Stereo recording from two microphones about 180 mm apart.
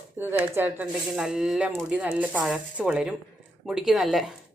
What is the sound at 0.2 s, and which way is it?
Speech, 10° right (ahead or behind).